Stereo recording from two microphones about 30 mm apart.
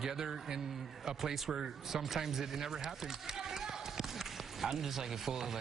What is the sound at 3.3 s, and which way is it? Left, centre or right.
Basketball bounce, centre.